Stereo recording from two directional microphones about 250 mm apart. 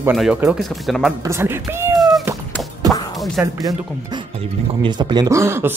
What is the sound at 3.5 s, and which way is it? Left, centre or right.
Speech, centre.